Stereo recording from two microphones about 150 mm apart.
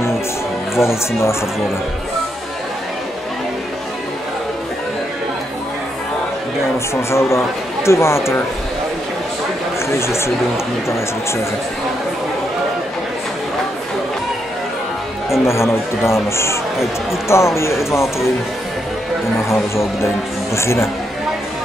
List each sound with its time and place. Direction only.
0.7 s speech: 15° left (ahead or behind)
7.0 s speech: 20° left (ahead or behind)
9.8 s speech: 15° left (ahead or behind)
15.4 s speech: 15° left (ahead or behind)
19.5 s speech: 20° left (ahead or behind)